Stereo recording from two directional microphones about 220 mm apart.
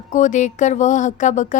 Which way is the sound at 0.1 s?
35° left (ahead or behind).